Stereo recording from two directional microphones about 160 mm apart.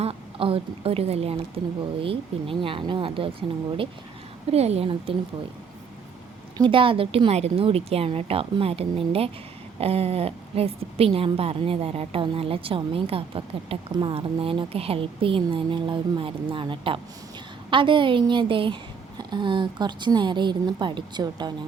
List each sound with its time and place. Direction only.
0.0 s a woman's voice: 35° right (ahead or behind)
4.5 s a woman's voice: 40° right (ahead or behind)
6.6 s a woman's voice: 35° right (ahead or behind)